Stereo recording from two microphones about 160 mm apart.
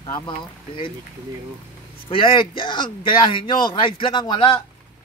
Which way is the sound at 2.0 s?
35° left (ahead or behind).